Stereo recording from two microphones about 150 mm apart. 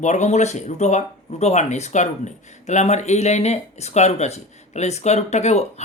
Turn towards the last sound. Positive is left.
turn(degrees=50)  # may be behind; listen again after turning